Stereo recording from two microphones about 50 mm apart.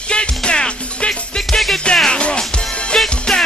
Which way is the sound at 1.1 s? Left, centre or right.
Centre.